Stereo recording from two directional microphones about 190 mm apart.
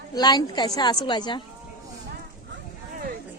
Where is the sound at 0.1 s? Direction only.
20° left (ahead or behind).